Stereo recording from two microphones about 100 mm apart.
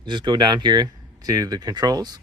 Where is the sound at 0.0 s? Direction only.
50° right (ahead or behind).